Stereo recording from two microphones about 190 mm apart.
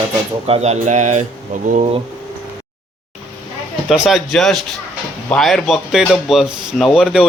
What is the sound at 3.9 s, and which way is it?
Speech, centre (ahead or behind).